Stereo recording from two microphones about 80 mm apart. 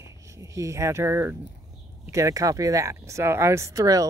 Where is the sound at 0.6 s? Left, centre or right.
Right.